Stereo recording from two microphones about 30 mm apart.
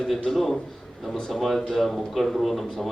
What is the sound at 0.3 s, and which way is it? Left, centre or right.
Speech, centre.